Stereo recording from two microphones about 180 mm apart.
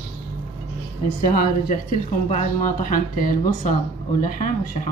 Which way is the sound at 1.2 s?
50° left (ahead or behind).